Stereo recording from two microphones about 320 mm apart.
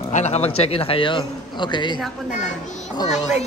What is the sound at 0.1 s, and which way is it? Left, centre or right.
A man's voice, left.